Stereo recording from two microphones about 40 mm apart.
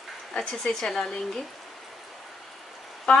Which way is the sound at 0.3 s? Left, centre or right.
Left.